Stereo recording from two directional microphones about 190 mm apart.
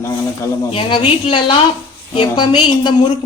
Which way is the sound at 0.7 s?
30° left (ahead or behind).